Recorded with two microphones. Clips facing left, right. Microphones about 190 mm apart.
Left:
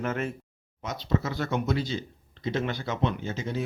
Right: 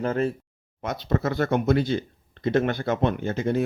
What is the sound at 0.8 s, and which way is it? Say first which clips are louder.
Speech: right 3 dB; 55° right (ahead or behind).